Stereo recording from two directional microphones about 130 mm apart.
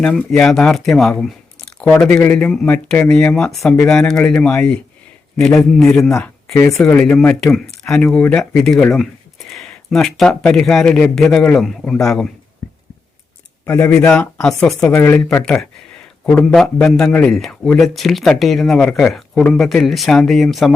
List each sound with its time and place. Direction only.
0.0 s speech: 5° left (ahead or behind)
6.5 s speech: 20° left (ahead or behind)
6.8 s speech: 5° left (ahead or behind)
13.7 s speech: 15° left (ahead or behind)
14.1 s speech: 5° left (ahead or behind)
14.9 s speech: 15° left (ahead or behind); by 20.7 s centre (ahead or behind)